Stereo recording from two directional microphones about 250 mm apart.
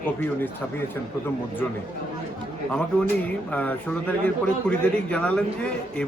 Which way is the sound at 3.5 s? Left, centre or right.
Centre.